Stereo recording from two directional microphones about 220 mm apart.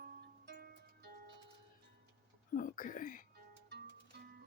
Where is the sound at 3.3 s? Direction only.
50° right (ahead or behind).